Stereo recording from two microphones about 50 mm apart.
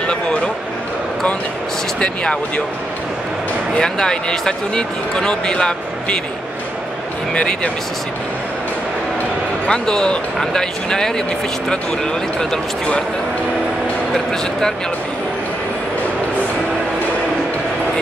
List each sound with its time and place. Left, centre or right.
0.0 s a sound: centre
2.0 s speech: left
3.7 s speech: centre
7.3 s speech: centre
9.7 s speech: centre